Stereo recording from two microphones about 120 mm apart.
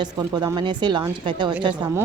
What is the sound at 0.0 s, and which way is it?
Speech, 35° right (ahead or behind).